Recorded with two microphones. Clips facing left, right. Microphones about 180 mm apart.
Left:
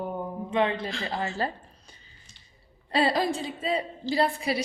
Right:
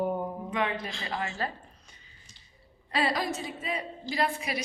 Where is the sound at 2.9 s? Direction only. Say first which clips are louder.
Left 4 dB; 30° left (ahead or behind).